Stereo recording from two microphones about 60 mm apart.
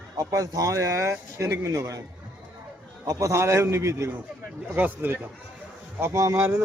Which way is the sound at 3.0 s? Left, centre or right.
Right.